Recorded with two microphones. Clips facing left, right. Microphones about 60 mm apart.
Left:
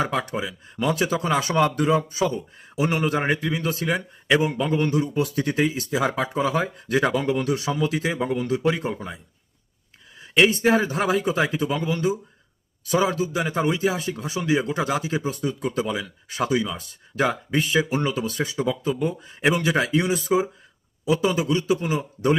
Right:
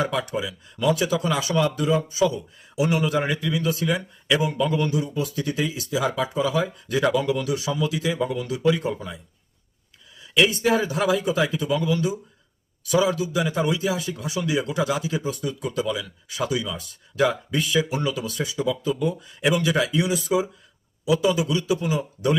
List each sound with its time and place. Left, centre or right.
0.0 s speech: left
4.9 s speech: left